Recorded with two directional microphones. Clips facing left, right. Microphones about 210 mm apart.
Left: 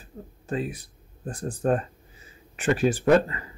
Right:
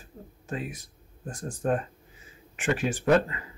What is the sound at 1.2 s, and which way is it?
Speech, 35° left (ahead or behind).